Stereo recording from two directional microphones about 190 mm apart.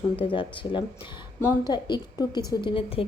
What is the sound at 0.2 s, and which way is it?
Speech, 25° left (ahead or behind).